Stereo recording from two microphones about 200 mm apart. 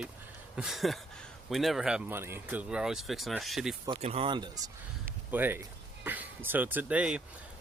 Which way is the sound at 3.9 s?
30° right (ahead or behind).